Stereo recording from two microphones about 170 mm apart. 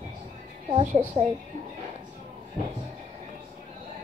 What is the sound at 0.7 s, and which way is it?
Speech, 35° right (ahead or behind).